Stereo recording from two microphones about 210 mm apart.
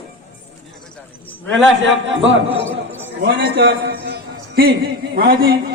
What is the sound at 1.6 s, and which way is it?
A man's voice, 65° right (ahead or behind).